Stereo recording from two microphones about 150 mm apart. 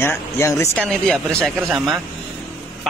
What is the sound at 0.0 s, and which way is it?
Speech, 15° left (ahead or behind).